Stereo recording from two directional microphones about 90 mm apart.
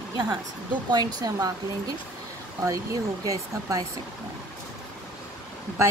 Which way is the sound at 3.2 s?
40° right (ahead or behind).